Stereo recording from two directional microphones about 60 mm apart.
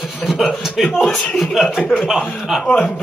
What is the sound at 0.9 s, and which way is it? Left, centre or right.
Speech, centre.